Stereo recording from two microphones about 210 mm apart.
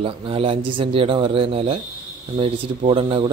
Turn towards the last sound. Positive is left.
turn(degrees=-25)  # may be behind; listen again after turning